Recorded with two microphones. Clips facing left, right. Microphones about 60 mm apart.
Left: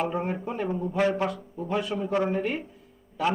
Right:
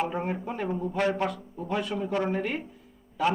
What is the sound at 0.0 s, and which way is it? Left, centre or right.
Speech, centre.